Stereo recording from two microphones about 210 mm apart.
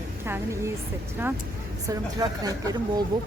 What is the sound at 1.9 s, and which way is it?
Speech, 15° right (ahead or behind).